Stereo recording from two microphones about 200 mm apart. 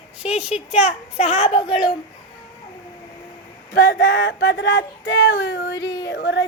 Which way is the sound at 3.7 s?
60° left (ahead or behind).